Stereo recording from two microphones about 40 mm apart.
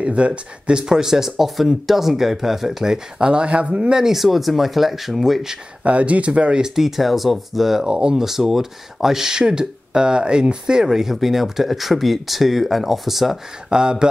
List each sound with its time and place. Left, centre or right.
0.0 s speech: right; by 3.0 s centre
3.2 s speech: right
4.0 s speech: centre
5.9 s speech: right
6.6 s speech: centre
7.9 s speech: centre
13.7 s speech: centre